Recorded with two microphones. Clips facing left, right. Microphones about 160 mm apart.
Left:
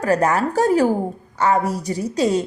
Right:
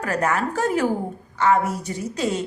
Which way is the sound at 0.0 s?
35° left (ahead or behind).